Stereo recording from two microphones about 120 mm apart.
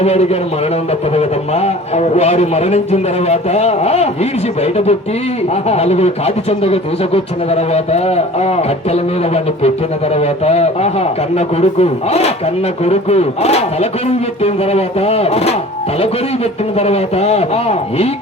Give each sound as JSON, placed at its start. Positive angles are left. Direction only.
{"t": 0.0, "sound": "speech", "side_deg": 60}
{"t": 16.7, "sound": "speech", "side_deg": 60}